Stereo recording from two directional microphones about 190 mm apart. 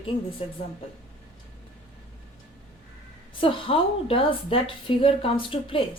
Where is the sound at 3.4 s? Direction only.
30° left (ahead or behind).